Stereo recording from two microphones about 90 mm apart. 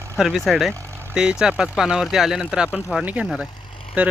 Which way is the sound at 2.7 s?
20° left (ahead or behind).